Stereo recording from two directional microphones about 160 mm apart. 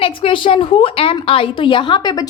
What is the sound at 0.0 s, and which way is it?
A woman's voice, 35° left (ahead or behind).